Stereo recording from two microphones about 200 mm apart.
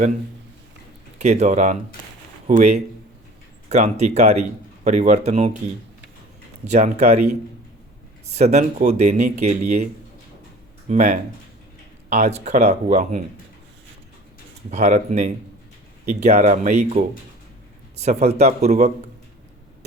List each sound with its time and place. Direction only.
1.2 s speech: 35° right (ahead or behind)
6.7 s speech: 35° right (ahead or behind)
14.7 s speech: 35° right (ahead or behind)